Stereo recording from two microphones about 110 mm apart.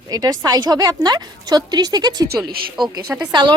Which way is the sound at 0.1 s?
35° right (ahead or behind).